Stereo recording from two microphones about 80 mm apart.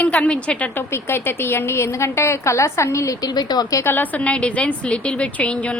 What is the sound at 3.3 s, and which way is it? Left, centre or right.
Speech, left.